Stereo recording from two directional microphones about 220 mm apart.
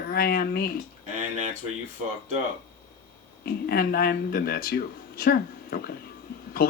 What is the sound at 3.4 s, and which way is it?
Speech, 45° left (ahead or behind).